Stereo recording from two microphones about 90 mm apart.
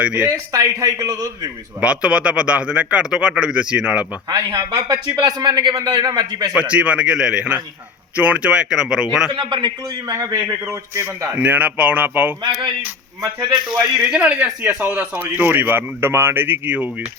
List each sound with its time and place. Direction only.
0.0 s a man's voice: 10° right (ahead or behind)
0.5 s a man's voice: 40° right (ahead or behind)
1.8 s a man's voice: 10° right (ahead or behind)
4.3 s a man's voice: 45° right (ahead or behind)
6.6 s a man's voice: 15° right (ahead or behind)
9.3 s a man's voice: 60° right (ahead or behind)
10.1 s a man's voice: 40° right (ahead or behind)
11.3 s speech: 15° right (ahead or behind)
13.7 s a man's voice: 5° right (ahead or behind)